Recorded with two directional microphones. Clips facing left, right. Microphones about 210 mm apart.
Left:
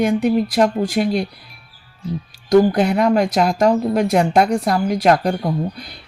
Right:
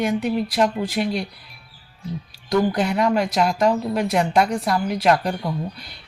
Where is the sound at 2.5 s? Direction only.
45° left (ahead or behind).